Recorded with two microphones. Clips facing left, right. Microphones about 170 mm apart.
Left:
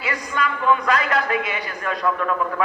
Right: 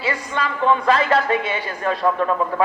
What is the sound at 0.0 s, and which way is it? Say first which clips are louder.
Speech: right 1 dB; 30° right (ahead or behind).